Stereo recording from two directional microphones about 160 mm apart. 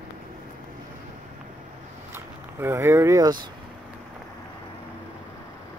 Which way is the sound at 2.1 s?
15° right (ahead or behind).